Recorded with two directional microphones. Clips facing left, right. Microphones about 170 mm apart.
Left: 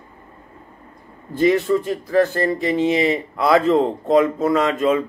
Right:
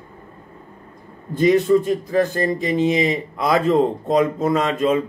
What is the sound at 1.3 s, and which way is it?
Speech, 20° right (ahead or behind).